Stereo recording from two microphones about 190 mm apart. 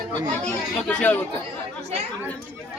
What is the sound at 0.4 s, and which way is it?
Speech, 5° left (ahead or behind).